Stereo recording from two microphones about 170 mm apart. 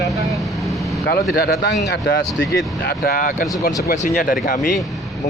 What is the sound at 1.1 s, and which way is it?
Speech, 65° left (ahead or behind).